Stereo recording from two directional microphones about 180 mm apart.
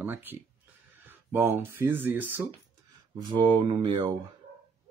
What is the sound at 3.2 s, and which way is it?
Speech, 25° right (ahead or behind).